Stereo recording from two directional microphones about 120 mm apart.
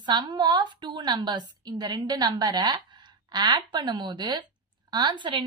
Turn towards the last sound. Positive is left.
turn(degrees=-40)  # may be behind; listen again after turning